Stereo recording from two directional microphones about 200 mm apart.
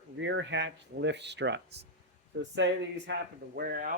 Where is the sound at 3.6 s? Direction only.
45° right (ahead or behind).